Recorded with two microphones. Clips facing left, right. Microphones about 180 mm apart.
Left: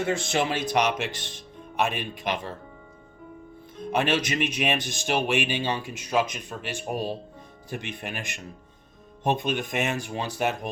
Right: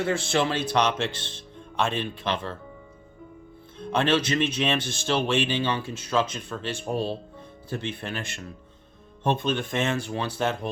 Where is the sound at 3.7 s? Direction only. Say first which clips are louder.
Right 1 dB; 10° left (ahead or behind).